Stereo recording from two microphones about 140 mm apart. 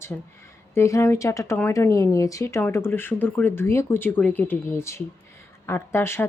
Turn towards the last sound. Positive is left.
turn(degrees=15)  # may be behind; listen again after turning